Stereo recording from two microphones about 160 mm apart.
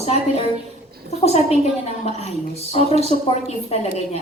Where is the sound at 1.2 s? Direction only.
40° left (ahead or behind).